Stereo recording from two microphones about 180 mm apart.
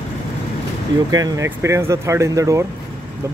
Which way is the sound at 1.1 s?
20° right (ahead or behind).